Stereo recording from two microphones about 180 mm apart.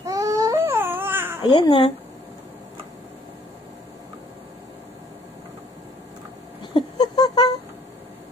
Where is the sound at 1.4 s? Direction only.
25° left (ahead or behind).